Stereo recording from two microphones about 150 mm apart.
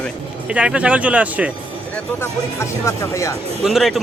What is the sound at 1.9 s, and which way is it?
Speech, 15° left (ahead or behind).